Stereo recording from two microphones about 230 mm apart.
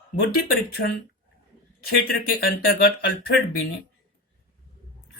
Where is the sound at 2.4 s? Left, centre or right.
Left.